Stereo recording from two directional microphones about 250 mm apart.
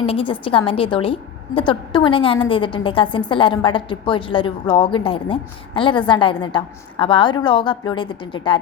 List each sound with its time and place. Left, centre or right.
0.0 s a woman's voice: left